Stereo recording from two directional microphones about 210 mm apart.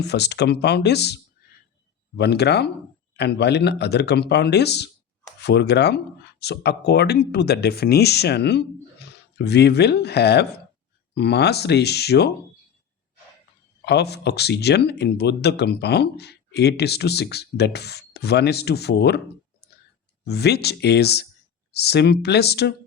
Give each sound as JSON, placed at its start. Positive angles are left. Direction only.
{"t": 0.0, "sound": "speech", "side_deg": 55}
{"t": 13.8, "sound": "speech", "side_deg": 50}
{"t": 20.2, "sound": "speech", "side_deg": 50}